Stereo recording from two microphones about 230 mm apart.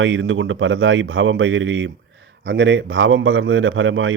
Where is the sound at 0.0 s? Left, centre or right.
Right.